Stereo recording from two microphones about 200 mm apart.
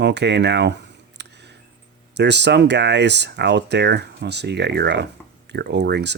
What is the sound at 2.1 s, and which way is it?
Speech, 60° right (ahead or behind).